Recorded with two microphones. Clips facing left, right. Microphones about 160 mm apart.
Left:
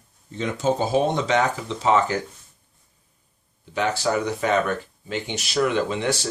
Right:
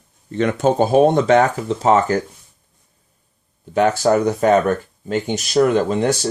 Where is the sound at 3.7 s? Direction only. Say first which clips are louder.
Right 8 dB; 45° right (ahead or behind).